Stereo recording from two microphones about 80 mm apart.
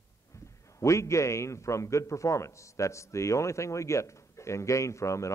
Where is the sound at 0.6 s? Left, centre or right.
Left.